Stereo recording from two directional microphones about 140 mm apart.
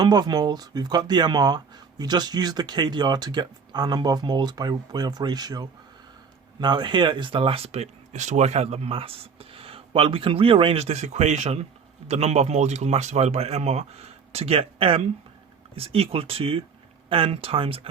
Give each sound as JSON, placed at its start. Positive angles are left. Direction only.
{"t": 0.0, "sound": "speech", "side_deg": -30}